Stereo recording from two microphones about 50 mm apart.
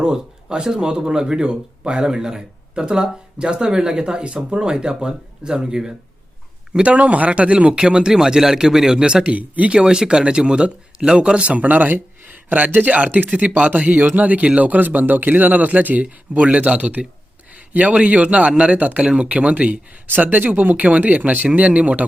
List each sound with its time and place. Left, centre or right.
0.0 s speech: centre
6.8 s a man's voice: right
20.1 s a man's voice: right